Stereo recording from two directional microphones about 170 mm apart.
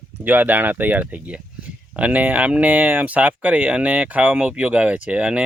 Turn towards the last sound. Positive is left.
turn(degrees=-5)  # may be behind; listen again after turning